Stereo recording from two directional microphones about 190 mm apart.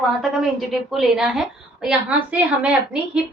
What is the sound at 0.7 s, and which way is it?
A woman's voice, centre (ahead or behind).